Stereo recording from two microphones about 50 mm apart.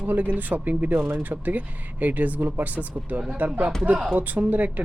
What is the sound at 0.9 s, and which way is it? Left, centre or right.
Speech, right.